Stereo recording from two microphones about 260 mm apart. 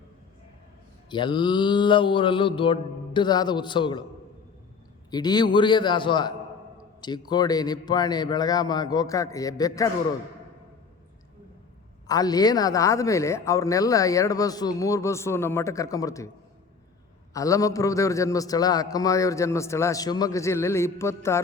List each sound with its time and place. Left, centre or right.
1.1 s a man's voice: centre
5.1 s a man's voice: centre
12.0 s a man's voice: centre
17.3 s a man's voice: centre